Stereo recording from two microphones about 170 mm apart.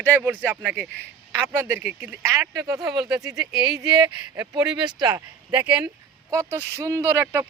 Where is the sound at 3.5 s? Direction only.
75° right (ahead or behind).